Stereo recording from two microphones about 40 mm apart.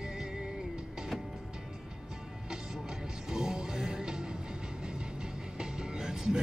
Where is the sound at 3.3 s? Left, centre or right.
Centre.